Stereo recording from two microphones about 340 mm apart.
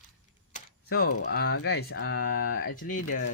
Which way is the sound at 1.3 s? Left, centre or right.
Left.